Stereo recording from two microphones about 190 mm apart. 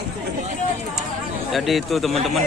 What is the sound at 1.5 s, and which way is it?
Speech, centre (ahead or behind).